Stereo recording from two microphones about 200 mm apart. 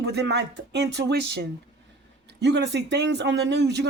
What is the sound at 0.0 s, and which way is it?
Speech, 55° right (ahead or behind).